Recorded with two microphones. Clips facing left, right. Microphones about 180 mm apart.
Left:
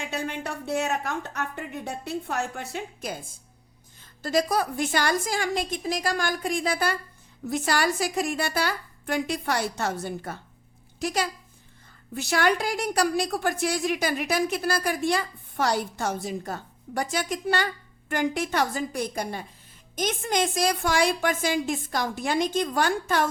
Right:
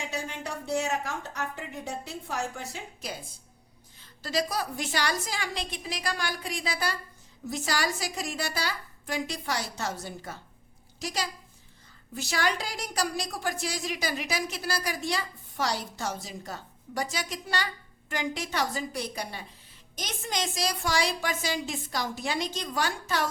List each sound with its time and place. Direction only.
0.1 s a woman's voice: 60° left (ahead or behind)